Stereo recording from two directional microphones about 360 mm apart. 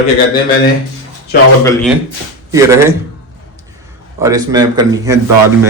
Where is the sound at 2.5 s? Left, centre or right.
Centre.